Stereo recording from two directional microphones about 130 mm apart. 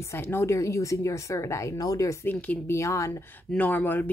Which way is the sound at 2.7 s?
25° left (ahead or behind).